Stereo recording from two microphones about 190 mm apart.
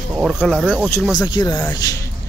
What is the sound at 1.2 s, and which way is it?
Speech, 25° left (ahead or behind).